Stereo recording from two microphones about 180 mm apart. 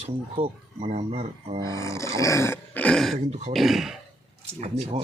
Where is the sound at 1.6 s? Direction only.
15° left (ahead or behind).